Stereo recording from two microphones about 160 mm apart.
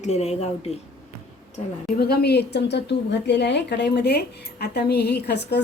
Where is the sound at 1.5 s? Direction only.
65° left (ahead or behind).